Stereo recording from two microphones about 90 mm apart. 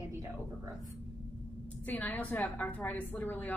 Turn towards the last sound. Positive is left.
turn(degrees=20)  # may be behind; listen again after turning